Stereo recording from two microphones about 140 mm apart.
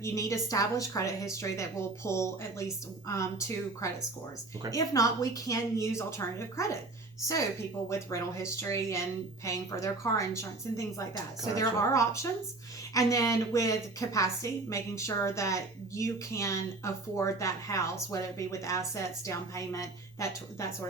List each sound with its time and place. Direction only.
0.0 s speech: 25° left (ahead or behind)
7.9 s speech: 20° left (ahead or behind)